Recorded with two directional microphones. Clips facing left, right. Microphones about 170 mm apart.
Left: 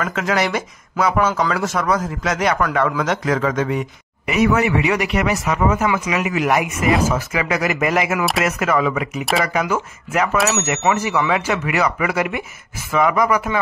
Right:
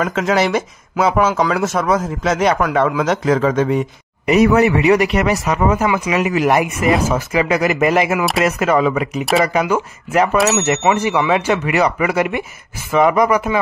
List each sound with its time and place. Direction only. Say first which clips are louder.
0.0 s a man's voice: right 4 dB; 25° right (ahead or behind)